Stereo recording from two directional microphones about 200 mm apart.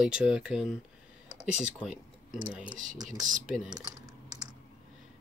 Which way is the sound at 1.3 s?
35° right (ahead or behind).